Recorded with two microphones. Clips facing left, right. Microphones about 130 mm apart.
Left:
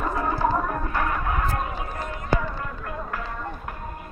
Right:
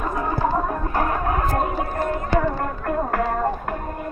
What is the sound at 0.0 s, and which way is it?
Music, 15° right (ahead or behind).